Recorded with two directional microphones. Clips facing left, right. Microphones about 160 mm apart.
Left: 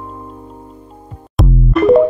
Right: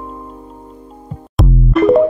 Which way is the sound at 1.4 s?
Centre (ahead or behind).